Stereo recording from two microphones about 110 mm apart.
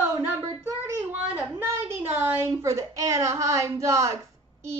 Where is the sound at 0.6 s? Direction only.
25° right (ahead or behind).